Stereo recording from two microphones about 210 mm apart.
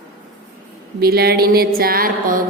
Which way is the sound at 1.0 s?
50° right (ahead or behind).